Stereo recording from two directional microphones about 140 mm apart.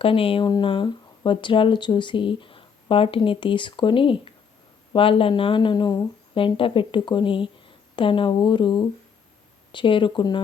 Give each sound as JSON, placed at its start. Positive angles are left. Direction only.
{"t": 0.0, "sound": "speech", "side_deg": 40}